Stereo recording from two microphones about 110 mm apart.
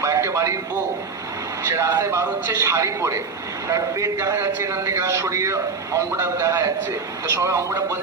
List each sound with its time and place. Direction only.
0.0 s music: 25° right (ahead or behind)
1.7 s a man's voice: 30° right (ahead or behind)